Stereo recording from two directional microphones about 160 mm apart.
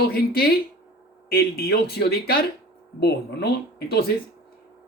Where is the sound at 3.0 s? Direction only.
90° left.